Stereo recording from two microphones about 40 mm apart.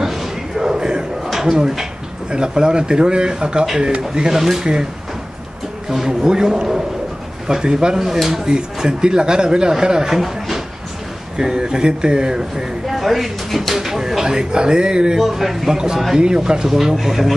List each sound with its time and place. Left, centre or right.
0.0 s a sound: centre
1.2 s speech: centre
5.9 s speech: centre
12.9 s speech: centre; by 15.1 s right
15.1 s a man's voice: centre
16.2 s speech: centre
16.7 s a man's voice: centre